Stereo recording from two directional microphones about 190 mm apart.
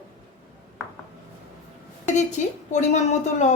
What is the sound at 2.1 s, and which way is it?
Speech, 40° left (ahead or behind).